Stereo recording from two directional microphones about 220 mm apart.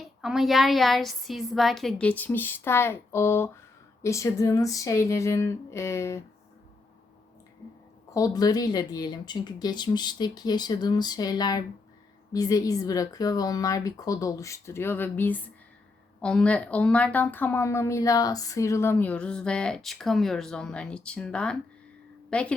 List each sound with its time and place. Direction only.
0.0 s a woman's voice: centre (ahead or behind)
8.1 s a woman's voice: 15° left (ahead or behind)